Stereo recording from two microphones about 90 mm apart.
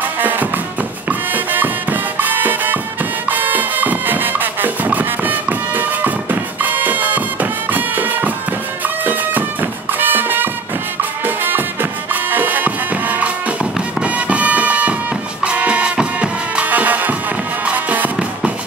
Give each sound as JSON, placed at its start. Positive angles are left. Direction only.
{"t": 0.2, "sound": "music", "side_deg": -20}